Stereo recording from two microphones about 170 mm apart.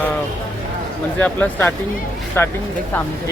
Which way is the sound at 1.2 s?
10° left (ahead or behind).